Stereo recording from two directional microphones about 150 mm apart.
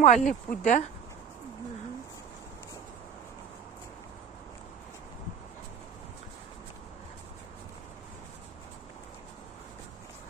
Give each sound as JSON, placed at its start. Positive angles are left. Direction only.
{"t": 0.0, "sound": "speech", "side_deg": 50}